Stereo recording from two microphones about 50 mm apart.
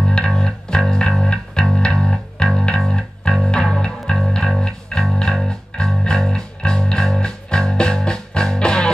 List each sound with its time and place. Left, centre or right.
0.1 s music: centre